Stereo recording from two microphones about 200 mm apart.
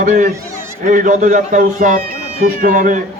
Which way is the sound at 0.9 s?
40° right (ahead or behind).